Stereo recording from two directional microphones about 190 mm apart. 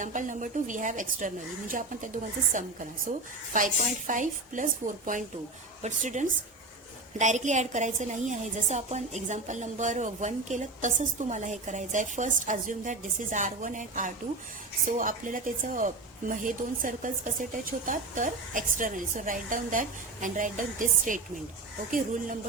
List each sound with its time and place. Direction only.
0.0 s a woman's voice: 40° right (ahead or behind)